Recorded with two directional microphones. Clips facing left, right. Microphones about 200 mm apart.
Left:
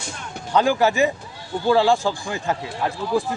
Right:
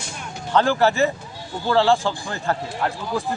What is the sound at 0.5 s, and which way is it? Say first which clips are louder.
Speech: even; 10° left (ahead or behind).